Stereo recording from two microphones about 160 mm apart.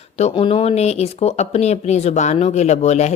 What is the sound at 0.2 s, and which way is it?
A woman's voice, 40° left (ahead or behind).